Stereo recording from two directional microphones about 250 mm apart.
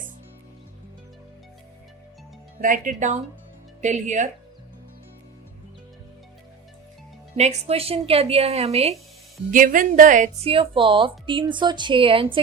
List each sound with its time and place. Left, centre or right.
2.6 s speech: right
7.3 s speech: right